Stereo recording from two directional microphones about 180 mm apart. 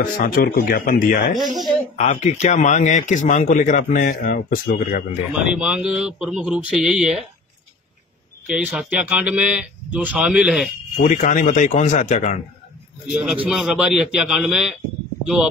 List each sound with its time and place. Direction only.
0.0 s a man's voice: 50° left (ahead or behind)
2.0 s a man's voice: 40° left (ahead or behind)
5.3 s a man's voice: 5° right (ahead or behind)
8.5 s speech: 5° right (ahead or behind)
11.0 s a man's voice: 45° left (ahead or behind)
13.1 s a man's voice: 5° right (ahead or behind)